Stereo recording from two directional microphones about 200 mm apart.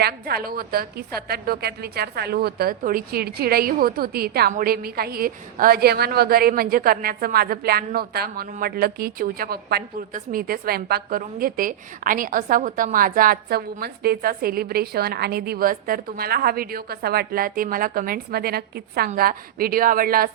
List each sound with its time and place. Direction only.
0.0 s a woman's voice: 50° right (ahead or behind)